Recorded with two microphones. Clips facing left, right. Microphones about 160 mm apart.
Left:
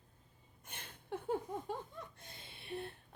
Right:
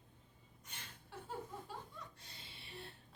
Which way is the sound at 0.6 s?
55° left (ahead or behind).